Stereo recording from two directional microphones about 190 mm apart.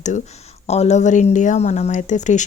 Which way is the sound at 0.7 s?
35° left (ahead or behind).